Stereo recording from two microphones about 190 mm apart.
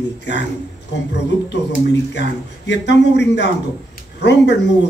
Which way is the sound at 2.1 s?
65° left (ahead or behind).